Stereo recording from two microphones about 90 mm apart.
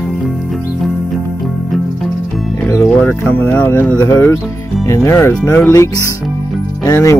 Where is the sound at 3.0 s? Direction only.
25° left (ahead or behind).